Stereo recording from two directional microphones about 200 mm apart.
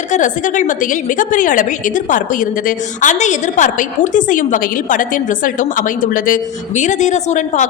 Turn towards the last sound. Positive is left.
turn(degrees=35)  # may be behind; listen again after turning